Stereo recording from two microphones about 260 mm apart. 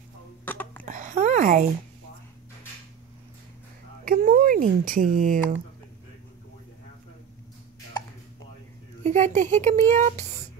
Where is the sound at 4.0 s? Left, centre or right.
Right.